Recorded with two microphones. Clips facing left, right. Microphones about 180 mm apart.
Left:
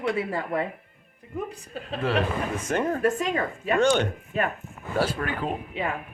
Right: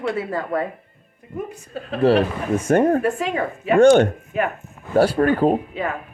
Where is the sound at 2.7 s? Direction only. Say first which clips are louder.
Right 7 dB; 50° right (ahead or behind).